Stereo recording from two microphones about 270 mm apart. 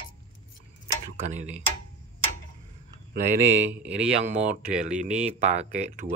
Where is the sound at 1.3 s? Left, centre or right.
Right.